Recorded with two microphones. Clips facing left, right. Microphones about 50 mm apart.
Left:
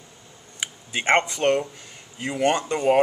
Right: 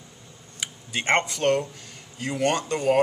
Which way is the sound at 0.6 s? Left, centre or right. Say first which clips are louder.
Left 1 dB; centre.